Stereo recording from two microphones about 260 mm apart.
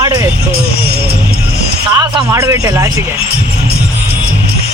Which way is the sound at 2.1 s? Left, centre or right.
Centre.